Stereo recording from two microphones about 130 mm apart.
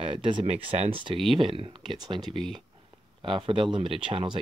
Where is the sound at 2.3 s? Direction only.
Centre (ahead or behind).